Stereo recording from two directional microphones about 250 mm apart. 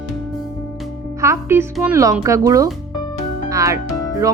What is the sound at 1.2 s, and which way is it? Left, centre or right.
Speech, centre.